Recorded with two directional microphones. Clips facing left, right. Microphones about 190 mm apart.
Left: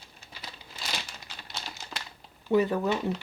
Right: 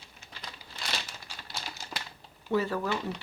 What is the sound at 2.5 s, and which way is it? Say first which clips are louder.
Speech: left 4 dB; 20° left (ahead or behind).